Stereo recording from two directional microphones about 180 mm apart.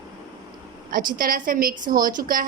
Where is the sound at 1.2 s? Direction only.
50° right (ahead or behind).